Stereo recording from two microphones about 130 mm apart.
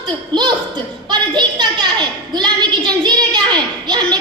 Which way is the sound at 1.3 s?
35° right (ahead or behind).